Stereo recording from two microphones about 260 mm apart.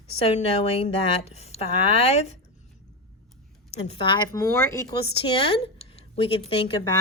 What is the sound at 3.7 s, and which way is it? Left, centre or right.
Speech, left.